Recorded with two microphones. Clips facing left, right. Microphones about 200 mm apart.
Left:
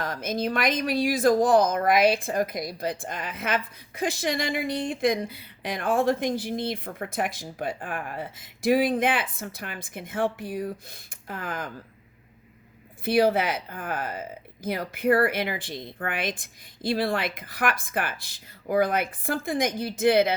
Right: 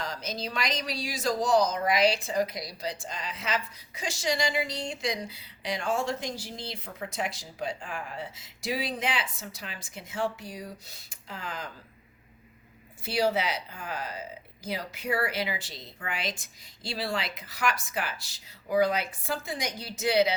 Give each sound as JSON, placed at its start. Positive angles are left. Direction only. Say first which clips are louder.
{"t": 0.0, "sound": "speech", "louder": "left 7 dB", "side_deg": 55}
{"t": 13.1, "sound": "speech", "louder": "left 6 dB", "side_deg": 55}